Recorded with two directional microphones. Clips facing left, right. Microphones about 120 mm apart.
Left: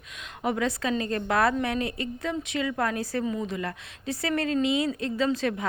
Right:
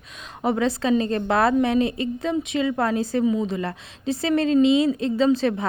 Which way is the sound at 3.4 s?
25° right (ahead or behind).